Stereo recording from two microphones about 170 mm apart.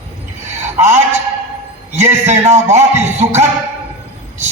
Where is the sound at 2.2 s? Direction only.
40° right (ahead or behind).